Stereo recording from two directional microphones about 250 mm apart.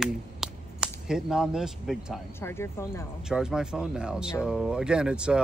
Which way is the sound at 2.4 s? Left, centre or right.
Centre.